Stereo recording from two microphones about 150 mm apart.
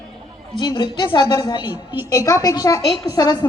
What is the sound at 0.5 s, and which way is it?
A woman's voice, 30° left (ahead or behind).